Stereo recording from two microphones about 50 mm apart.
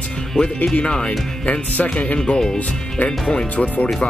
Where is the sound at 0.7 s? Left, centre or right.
Centre.